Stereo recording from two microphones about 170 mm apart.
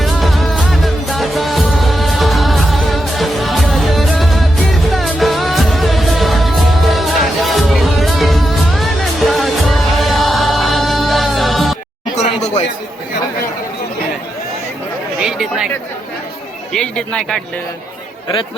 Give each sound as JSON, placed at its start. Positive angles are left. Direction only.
{"t": 0.0, "sound": "music", "side_deg": 0}
{"t": 12.1, "sound": "a sound", "side_deg": 40}
{"t": 15.2, "sound": "chatter", "side_deg": -5}
{"t": 16.7, "sound": "speech", "side_deg": 5}